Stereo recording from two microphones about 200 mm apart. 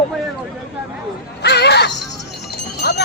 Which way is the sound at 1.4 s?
55° left (ahead or behind).